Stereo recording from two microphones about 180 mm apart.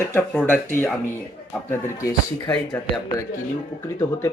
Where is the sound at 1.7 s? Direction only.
15° left (ahead or behind).